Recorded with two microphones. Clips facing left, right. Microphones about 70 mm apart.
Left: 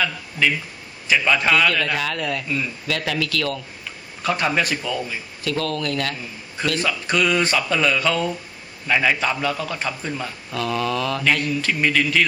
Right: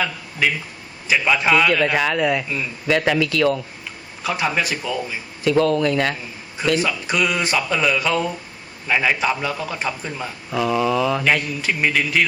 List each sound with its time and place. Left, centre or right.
0.0 s a man's voice: centre
4.2 s speech: centre
5.4 s a man's voice: right
6.7 s a man's voice: centre